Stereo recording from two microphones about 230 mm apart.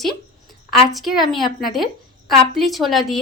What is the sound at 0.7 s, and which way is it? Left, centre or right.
A woman's voice, centre.